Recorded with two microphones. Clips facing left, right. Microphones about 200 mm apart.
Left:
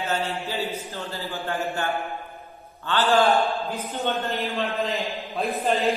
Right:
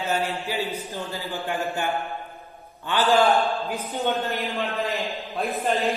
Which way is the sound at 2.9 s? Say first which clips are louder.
Even; 15° right (ahead or behind).